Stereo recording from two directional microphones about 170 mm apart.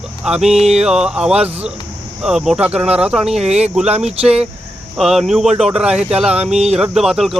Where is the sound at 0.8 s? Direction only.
5° right (ahead or behind).